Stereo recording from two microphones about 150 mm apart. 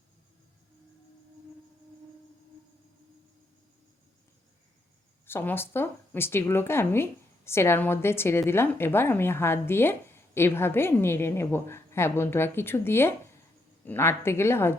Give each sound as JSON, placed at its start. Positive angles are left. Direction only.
{"t": 5.2, "sound": "speech", "side_deg": 15}